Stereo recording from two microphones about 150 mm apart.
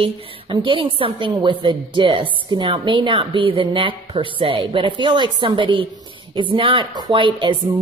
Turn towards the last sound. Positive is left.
turn(degrees=-35)  # may be behind; listen again after turning